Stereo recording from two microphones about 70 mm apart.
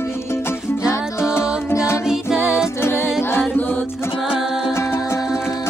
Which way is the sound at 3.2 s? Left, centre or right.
Left.